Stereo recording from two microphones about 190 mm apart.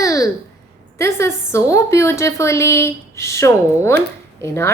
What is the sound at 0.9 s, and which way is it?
A woman's voice, 15° left (ahead or behind).